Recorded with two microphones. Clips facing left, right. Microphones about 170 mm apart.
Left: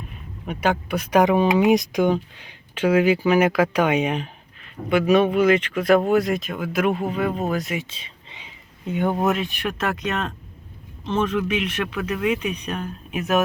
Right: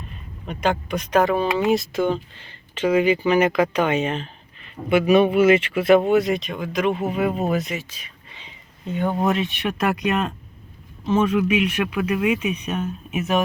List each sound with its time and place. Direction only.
0.4 s speech: 10° left (ahead or behind)
4.6 s speech: 5° right (ahead or behind)
7.0 s speech: 5° right (ahead or behind)
7.8 s whispering: 25° left (ahead or behind)
8.4 s speech: 10° left (ahead or behind)
9.7 s speech: 10° right (ahead or behind)